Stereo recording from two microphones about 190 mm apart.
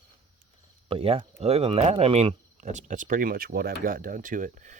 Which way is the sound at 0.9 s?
30° right (ahead or behind).